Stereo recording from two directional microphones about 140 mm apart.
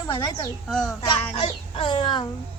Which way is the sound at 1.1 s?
40° left (ahead or behind).